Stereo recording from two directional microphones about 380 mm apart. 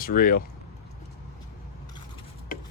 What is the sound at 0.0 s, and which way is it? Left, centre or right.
Speech, left.